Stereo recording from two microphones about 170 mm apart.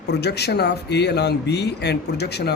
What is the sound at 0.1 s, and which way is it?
A man's voice, 75° left (ahead or behind).